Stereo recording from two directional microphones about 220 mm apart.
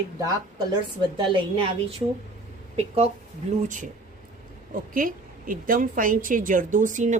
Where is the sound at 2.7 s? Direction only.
30° right (ahead or behind).